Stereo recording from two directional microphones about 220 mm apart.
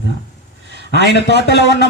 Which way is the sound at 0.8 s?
50° left (ahead or behind).